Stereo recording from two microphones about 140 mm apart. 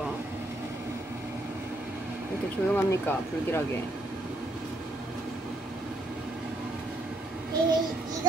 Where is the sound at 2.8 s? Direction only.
15° left (ahead or behind).